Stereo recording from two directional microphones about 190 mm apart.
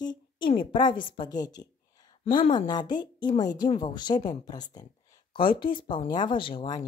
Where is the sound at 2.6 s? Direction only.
20° left (ahead or behind).